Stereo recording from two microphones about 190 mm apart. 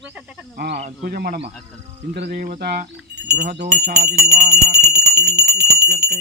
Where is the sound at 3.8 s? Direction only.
60° right (ahead or behind).